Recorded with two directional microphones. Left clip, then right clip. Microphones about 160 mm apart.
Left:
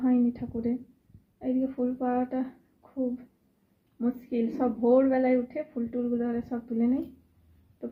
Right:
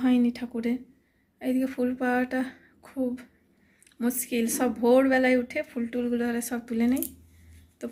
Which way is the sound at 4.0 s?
20° right (ahead or behind).